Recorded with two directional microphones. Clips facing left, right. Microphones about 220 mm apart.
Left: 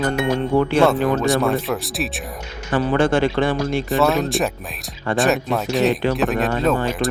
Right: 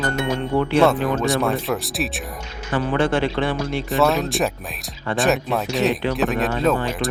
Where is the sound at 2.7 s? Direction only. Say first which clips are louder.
Left 3 dB; 45° left (ahead or behind).